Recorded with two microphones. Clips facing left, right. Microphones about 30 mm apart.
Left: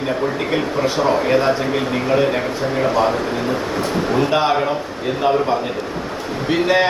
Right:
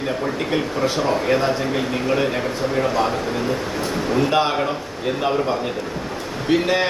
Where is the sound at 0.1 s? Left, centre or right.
Centre.